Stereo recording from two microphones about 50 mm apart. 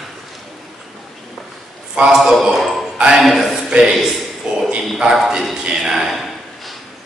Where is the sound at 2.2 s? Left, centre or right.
Centre.